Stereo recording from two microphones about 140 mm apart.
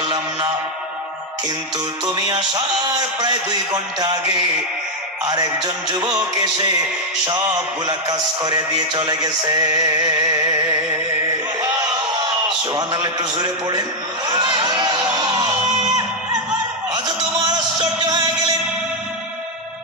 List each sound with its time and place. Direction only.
0.0 s music: 30° right (ahead or behind)
2.1 s a man's voice: 30° right (ahead or behind)
5.2 s music: 30° right (ahead or behind)
7.9 s music: 30° right (ahead or behind)
12.7 s a man's voice: 30° right (ahead or behind)
15.1 s music: 30° right (ahead or behind)
16.9 s music: 30° right (ahead or behind)